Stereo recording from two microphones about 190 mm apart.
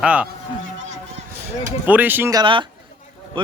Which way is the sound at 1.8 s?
10° right (ahead or behind).